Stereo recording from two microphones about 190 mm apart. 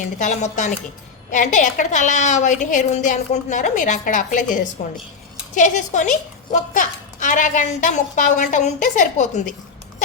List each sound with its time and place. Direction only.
0.0 s a woman's voice: 40° left (ahead or behind)